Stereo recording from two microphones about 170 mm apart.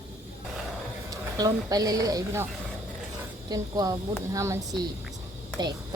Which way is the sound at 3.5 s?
20° right (ahead or behind).